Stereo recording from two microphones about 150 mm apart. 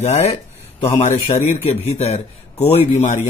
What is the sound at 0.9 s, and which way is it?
A man's voice, 50° left (ahead or behind).